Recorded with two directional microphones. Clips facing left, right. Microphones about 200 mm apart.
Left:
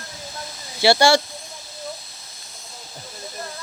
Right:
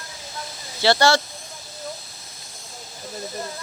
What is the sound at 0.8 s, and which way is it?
Speech, 10° left (ahead or behind).